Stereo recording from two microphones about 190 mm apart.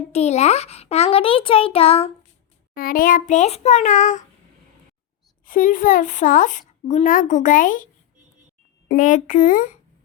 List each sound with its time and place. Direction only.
0.1 s a child's voice: 35° left (ahead or behind)
2.7 s a child's voice: 50° left (ahead or behind)
5.5 s speech: 45° left (ahead or behind)
8.9 s speech: 45° left (ahead or behind)